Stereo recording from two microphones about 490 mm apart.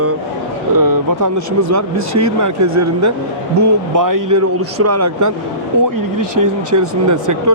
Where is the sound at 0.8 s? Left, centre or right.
Right.